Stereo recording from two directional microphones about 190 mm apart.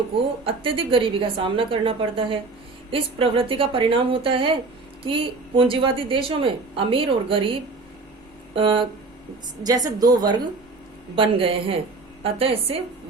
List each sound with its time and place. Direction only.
0.4 s a woman's voice: 30° right (ahead or behind)
8.5 s a woman's voice: 25° right (ahead or behind)